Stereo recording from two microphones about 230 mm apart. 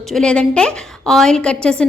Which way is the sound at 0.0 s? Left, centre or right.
Centre.